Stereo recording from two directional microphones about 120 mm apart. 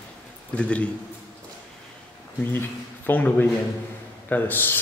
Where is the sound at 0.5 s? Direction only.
10° left (ahead or behind).